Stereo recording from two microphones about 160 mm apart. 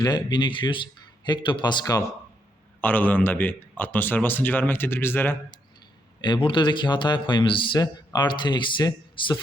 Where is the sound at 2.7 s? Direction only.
10° left (ahead or behind).